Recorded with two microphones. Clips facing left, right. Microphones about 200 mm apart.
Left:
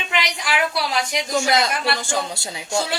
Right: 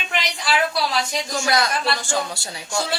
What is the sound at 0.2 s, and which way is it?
A woman's voice, 15° left (ahead or behind).